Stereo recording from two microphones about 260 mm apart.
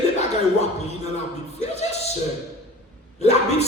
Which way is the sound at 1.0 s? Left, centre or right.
Left.